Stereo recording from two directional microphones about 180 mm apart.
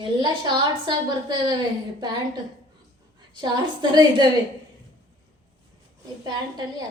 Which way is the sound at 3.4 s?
25° right (ahead or behind).